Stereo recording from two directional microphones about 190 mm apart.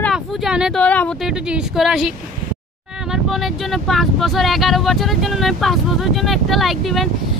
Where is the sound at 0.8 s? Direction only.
5° left (ahead or behind).